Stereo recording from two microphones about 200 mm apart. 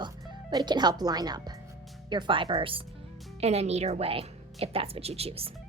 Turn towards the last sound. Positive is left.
turn(degrees=-30)  # may be behind; listen again after turning